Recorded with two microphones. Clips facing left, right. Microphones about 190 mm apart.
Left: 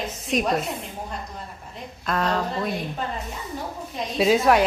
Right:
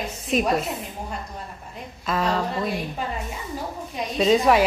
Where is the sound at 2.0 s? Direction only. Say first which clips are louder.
Even; centre (ahead or behind).